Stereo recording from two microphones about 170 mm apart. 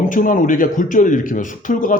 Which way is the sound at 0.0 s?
50° left (ahead or behind).